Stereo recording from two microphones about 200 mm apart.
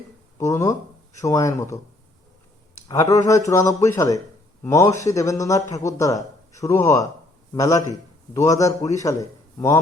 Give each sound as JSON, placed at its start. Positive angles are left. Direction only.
{"t": 0.3, "sound": "a man's voice", "side_deg": 15}